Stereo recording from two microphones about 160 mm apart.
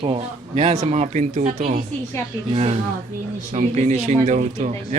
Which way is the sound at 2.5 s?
40° right (ahead or behind).